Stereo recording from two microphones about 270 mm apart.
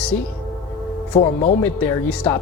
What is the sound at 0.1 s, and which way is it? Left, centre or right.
Speech, centre.